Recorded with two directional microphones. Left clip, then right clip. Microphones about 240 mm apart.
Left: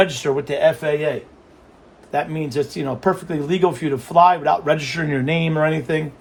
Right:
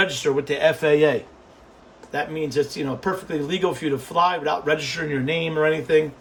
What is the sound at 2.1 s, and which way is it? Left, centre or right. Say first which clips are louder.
Speech: left 2 dB; centre.